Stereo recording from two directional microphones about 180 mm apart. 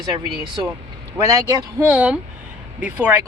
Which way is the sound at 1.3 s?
15° right (ahead or behind).